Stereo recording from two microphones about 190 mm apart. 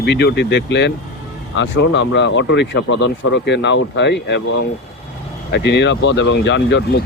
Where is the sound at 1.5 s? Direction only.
80° left.